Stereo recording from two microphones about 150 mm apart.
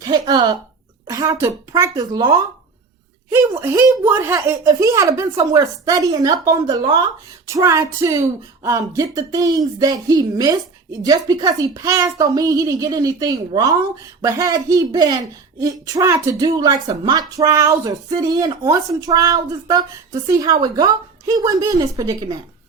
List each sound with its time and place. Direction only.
0.0 s speech: 25° right (ahead or behind)